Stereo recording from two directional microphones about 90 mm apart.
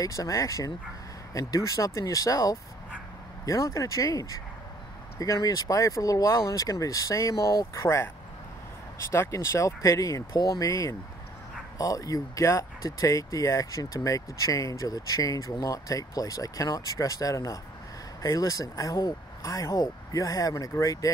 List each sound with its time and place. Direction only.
0.0 s speech: 40° left (ahead or behind)
9.1 s speech: 30° left (ahead or behind)